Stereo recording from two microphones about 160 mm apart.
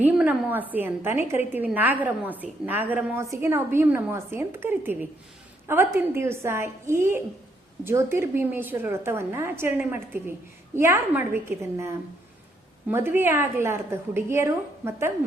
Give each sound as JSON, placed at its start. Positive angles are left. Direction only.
{"t": 0.0, "sound": "a woman's voice", "side_deg": -10}